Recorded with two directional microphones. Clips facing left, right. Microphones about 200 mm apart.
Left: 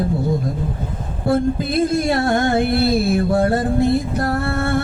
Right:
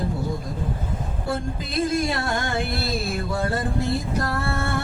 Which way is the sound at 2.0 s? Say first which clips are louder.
Left 9 dB; 55° left (ahead or behind).